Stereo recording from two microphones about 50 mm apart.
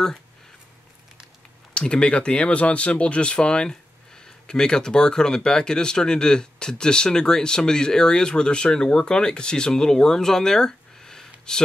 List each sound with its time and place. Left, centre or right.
1.7 s speech: centre